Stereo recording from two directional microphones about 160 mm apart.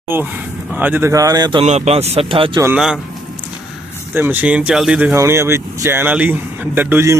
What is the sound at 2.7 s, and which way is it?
Speech, 5° right (ahead or behind).